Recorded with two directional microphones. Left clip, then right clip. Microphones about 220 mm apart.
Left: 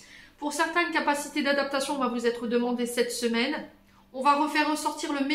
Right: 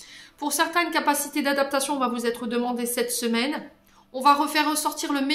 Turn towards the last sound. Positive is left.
turn(degrees=-40)  # may be behind; listen again after turning